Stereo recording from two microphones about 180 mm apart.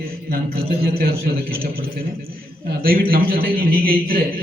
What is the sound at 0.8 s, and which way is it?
Speech, 60° right (ahead or behind).